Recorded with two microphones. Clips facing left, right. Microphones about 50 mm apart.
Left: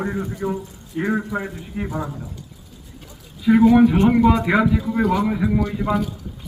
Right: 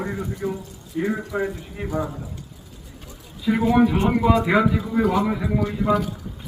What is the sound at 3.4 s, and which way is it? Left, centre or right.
A man's voice, centre.